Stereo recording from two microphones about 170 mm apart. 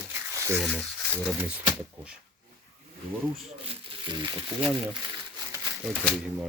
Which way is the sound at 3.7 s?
30° right (ahead or behind).